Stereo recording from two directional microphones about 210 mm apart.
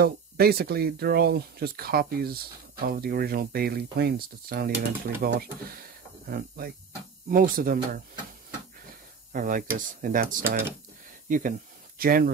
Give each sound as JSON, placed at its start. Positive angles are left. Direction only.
{"t": 0.0, "sound": "speech", "side_deg": -45}
{"t": 9.3, "sound": "speech", "side_deg": -40}